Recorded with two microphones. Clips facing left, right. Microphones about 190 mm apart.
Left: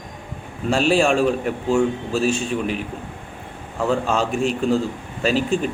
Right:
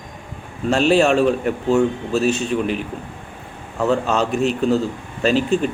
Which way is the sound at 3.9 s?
Centre (ahead or behind).